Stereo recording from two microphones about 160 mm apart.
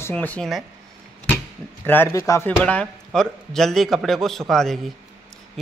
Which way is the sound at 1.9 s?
15° left (ahead or behind).